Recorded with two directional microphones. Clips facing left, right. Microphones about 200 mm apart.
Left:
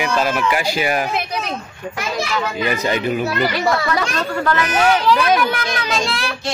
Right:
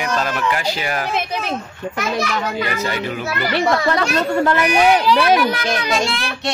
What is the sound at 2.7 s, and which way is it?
Speech, 15° left (ahead or behind).